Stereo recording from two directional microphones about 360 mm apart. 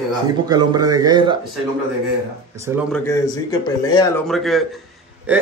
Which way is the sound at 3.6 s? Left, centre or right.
Centre.